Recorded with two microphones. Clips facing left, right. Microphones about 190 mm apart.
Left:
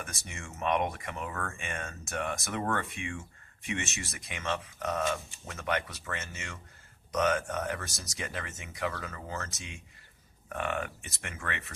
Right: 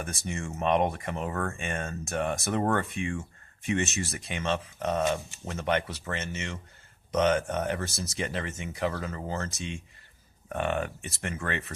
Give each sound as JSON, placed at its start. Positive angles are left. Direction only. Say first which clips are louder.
{"t": 0.0, "sound": "speech", "louder": "right 8 dB", "side_deg": -35}